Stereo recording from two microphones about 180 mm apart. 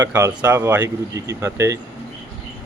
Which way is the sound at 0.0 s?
15° right (ahead or behind).